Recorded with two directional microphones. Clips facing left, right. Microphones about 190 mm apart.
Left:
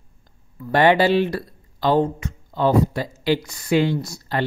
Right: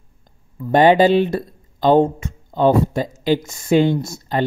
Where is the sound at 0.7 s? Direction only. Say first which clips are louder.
Right 4 dB; 20° right (ahead or behind).